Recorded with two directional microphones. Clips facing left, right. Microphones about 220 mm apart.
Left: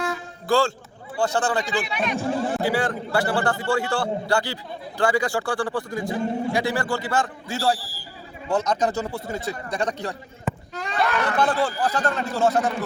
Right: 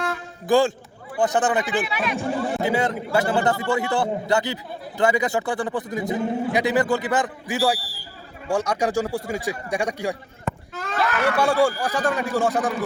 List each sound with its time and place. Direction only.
0.4 s a man's voice: 20° right (ahead or behind)
1.8 s speech: 5° right (ahead or behind)
2.6 s a man's voice: 20° right (ahead or behind)
10.4 s speech: centre (ahead or behind)